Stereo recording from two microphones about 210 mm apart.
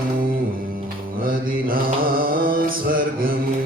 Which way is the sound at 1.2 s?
45° right (ahead or behind).